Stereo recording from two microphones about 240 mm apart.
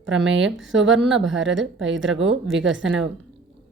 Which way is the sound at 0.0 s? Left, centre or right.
Right.